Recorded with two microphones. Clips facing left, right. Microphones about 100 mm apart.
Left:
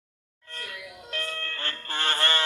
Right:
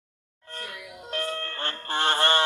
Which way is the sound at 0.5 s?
30° right (ahead or behind).